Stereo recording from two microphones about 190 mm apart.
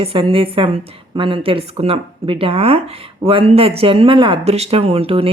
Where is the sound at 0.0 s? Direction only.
30° right (ahead or behind).